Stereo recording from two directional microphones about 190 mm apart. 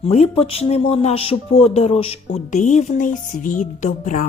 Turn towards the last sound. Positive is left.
turn(degrees=45)  # may be behind; listen again after turning